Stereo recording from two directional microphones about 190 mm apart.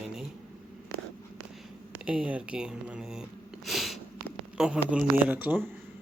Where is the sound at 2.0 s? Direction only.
5° right (ahead or behind).